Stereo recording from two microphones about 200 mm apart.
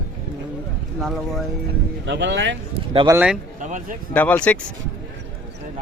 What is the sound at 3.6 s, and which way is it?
Speech, 40° right (ahead or behind).